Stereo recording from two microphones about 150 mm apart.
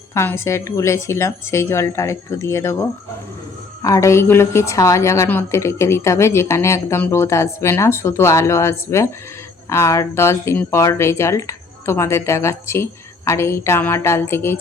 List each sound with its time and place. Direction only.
0.1 s speech: 15° left (ahead or behind)
3.8 s a woman's voice: 20° left (ahead or behind)